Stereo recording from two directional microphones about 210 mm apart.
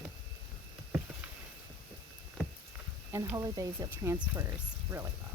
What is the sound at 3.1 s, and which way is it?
Speech, 15° right (ahead or behind).